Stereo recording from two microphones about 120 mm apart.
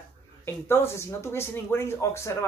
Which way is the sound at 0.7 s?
20° left (ahead or behind).